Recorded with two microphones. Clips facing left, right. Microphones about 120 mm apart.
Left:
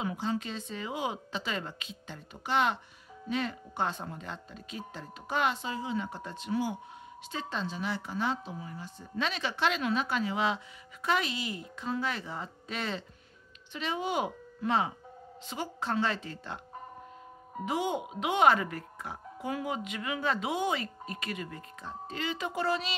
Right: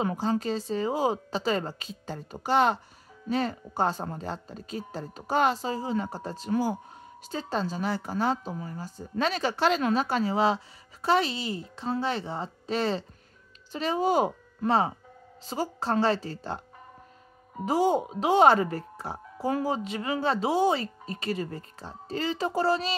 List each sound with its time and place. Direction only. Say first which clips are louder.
0.0 s a woman's voice: right 6 dB; 45° right (ahead or behind)
17.6 s a woman's voice: right 8 dB; 35° right (ahead or behind)